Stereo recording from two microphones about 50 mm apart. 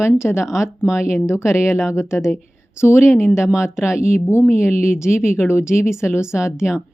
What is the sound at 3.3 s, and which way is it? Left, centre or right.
Speech, centre.